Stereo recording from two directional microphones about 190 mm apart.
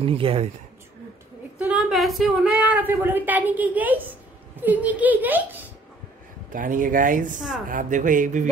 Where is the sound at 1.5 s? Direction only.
5° right (ahead or behind).